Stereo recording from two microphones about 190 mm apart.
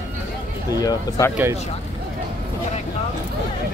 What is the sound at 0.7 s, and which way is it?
Speech, 20° left (ahead or behind).